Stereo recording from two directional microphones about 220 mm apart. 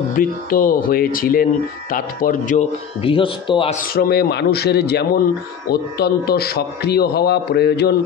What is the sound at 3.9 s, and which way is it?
A man's voice, 45° left (ahead or behind).